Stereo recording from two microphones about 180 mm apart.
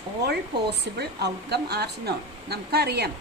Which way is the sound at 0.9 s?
65° right (ahead or behind).